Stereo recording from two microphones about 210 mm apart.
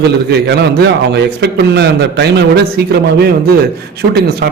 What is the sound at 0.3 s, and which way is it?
A man's voice, 50° right (ahead or behind).